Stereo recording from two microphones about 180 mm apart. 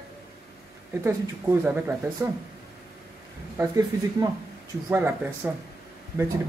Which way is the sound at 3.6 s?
20° right (ahead or behind).